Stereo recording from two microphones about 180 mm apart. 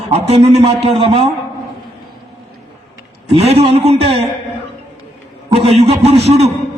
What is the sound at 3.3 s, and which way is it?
Speech, 35° right (ahead or behind).